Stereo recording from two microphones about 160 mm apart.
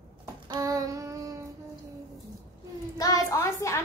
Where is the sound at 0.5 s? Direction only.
20° right (ahead or behind).